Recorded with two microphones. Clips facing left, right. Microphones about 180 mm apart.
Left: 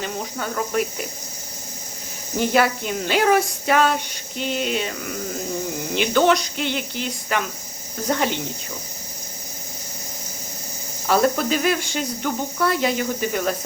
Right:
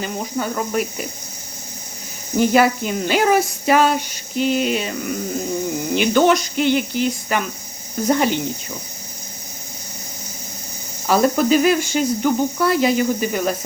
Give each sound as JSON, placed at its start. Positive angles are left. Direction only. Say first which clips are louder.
{"t": 0.0, "sound": "speech", "louder": "right 4 dB", "side_deg": -5}
{"t": 2.4, "sound": "speech", "louder": "right 4 dB", "side_deg": -5}
{"t": 11.0, "sound": "speech", "louder": "right 3 dB", "side_deg": -5}